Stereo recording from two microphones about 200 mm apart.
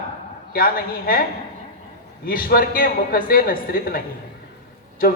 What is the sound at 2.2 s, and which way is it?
A man's voice, 45° left (ahead or behind).